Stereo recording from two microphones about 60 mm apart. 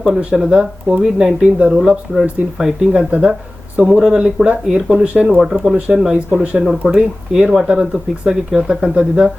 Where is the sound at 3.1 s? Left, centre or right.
Centre.